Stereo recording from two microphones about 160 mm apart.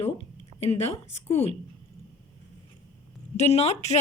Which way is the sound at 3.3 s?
45° left (ahead or behind).